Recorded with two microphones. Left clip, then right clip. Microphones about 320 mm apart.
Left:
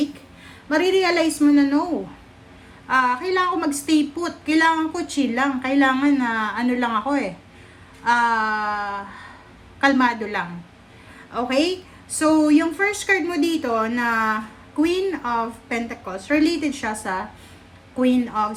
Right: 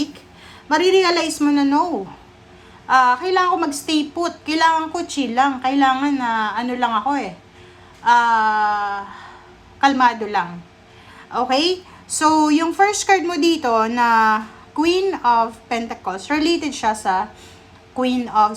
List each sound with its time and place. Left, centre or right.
0.7 s speech: centre
2.8 s speech: centre